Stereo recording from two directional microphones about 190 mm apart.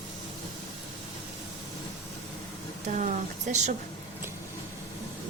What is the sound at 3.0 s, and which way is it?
Speech, 40° right (ahead or behind).